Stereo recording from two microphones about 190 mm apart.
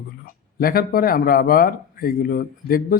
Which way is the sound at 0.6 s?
50° left (ahead or behind).